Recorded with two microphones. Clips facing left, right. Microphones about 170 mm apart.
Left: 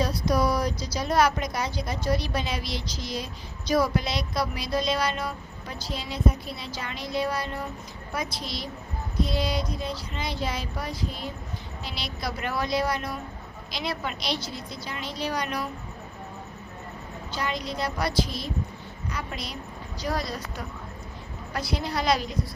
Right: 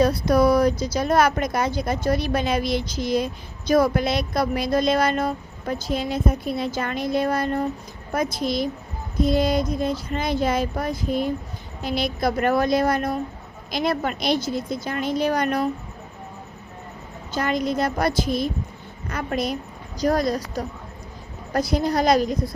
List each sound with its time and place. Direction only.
0.0 s speech: 55° right (ahead or behind)
17.3 s speech: 50° right (ahead or behind)